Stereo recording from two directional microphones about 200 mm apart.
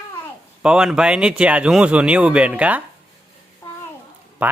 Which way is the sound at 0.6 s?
5° right (ahead or behind).